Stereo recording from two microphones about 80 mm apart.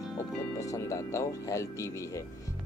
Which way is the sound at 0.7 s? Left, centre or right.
Left.